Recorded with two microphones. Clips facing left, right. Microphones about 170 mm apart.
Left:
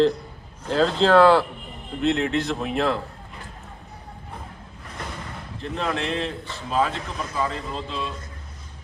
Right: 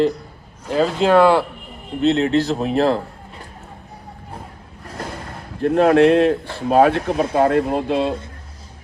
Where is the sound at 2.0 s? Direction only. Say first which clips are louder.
Right 6 dB; 35° right (ahead or behind).